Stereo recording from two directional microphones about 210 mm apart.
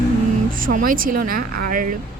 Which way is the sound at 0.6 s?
40° right (ahead or behind).